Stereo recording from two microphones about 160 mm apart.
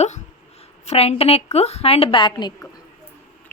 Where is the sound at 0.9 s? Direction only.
40° left (ahead or behind).